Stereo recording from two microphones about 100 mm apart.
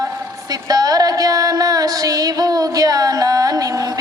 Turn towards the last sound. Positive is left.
turn(degrees=-35)  # may be behind; listen again after turning